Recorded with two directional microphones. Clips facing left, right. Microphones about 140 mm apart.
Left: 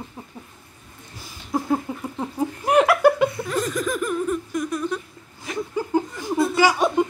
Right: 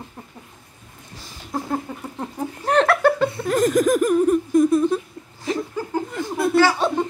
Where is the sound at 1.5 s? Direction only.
5° left (ahead or behind).